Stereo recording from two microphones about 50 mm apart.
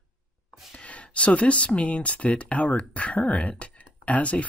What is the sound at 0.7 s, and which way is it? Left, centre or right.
Speech, left.